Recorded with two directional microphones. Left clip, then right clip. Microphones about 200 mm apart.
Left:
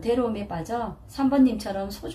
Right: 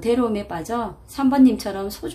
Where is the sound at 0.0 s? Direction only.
35° right (ahead or behind).